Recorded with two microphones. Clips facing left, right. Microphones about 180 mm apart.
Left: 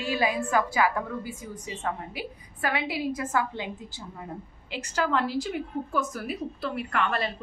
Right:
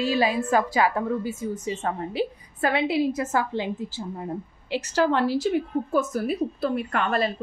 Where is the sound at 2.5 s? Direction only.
30° right (ahead or behind).